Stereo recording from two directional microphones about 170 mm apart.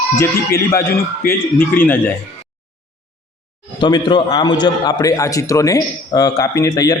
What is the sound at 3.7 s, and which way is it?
A man's voice, 25° left (ahead or behind).